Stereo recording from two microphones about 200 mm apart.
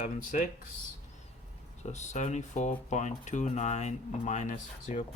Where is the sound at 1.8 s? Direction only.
35° left (ahead or behind).